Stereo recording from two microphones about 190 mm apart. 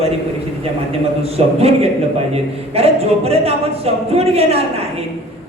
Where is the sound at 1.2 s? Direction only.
30° right (ahead or behind).